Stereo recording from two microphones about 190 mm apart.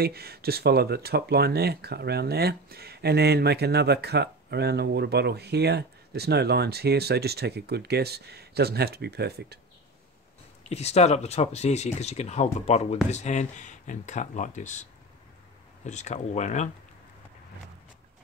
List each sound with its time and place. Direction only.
0.0 s speech: 55° right (ahead or behind)
10.7 s speech: 35° left (ahead or behind)